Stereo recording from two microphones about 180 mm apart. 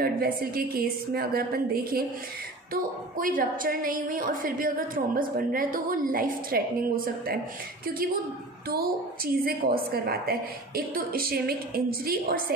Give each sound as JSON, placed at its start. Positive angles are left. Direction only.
{"t": 0.0, "sound": "a woman's voice", "side_deg": -55}
{"t": 7.8, "sound": "a woman's voice", "side_deg": -55}